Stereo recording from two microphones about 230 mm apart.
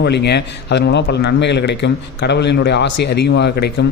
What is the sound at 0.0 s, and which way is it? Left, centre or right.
A man's voice, left.